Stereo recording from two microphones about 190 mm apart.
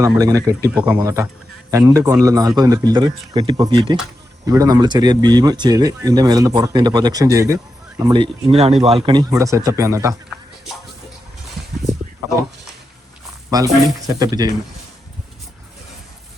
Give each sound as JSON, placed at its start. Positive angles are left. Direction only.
{"t": 0.0, "sound": "speech", "side_deg": -20}
{"t": 0.7, "sound": "speech", "side_deg": -5}
{"t": 0.9, "sound": "speech", "side_deg": -15}
{"t": 13.6, "sound": "speech", "side_deg": -20}